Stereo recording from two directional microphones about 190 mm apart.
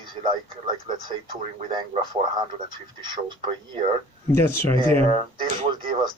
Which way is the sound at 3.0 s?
25° right (ahead or behind).